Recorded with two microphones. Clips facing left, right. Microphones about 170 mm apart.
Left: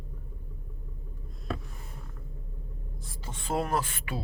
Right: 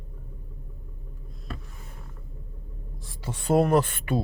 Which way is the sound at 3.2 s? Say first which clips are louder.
Right 9 dB; 70° right (ahead or behind).